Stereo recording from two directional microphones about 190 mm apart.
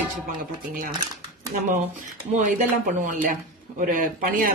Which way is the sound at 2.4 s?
45° right (ahead or behind).